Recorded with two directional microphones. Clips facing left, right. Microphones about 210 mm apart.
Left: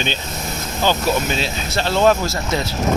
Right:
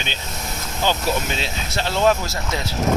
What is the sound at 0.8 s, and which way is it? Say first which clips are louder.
Speech: left 3 dB; 20° right (ahead or behind).